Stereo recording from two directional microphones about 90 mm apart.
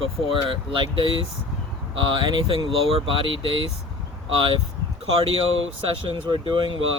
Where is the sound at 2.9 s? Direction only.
80° right.